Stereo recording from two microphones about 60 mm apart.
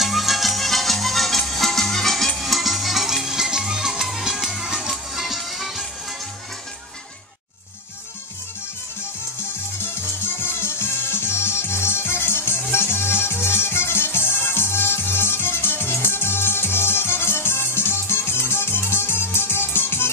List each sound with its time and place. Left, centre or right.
0.0 s music: centre
9.8 s music: left